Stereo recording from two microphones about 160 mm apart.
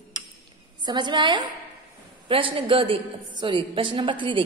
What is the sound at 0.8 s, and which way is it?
A woman's voice, 30° right (ahead or behind).